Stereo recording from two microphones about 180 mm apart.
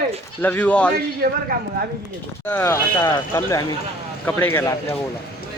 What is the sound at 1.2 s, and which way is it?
Speech, 55° right (ahead or behind).